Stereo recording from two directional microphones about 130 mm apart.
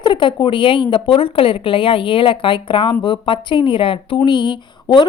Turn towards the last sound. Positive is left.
turn(degrees=35)  # may be behind; listen again after turning